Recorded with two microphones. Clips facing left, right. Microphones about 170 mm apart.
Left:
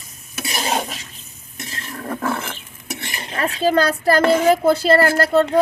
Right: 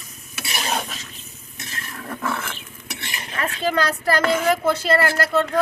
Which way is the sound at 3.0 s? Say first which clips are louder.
Left 4 dB; 40° left (ahead or behind).